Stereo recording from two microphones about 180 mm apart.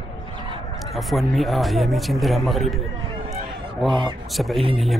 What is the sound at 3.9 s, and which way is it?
Speech, 25° right (ahead or behind).